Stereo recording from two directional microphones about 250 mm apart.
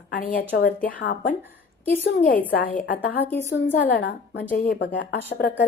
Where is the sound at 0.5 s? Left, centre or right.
Left.